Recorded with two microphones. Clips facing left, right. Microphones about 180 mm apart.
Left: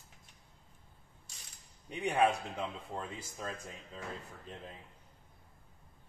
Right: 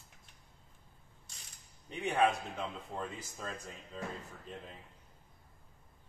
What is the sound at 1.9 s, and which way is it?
A man's voice, 10° left (ahead or behind).